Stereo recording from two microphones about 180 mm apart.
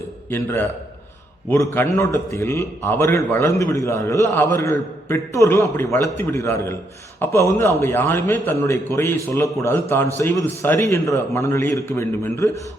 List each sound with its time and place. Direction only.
0.3 s a man's voice: 10° left (ahead or behind)